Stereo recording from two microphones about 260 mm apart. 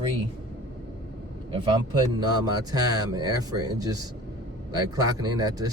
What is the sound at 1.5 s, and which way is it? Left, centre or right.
Speech, centre.